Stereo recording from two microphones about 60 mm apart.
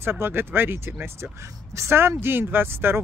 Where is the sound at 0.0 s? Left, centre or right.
Right.